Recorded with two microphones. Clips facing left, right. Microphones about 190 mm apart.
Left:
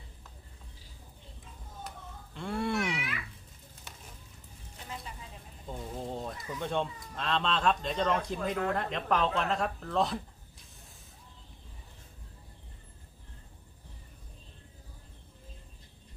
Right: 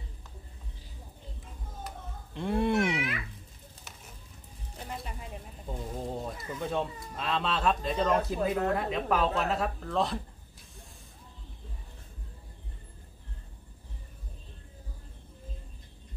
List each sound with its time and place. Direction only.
2.3 s wild animals: 20° right (ahead or behind)
5.7 s speech: 5° right (ahead or behind)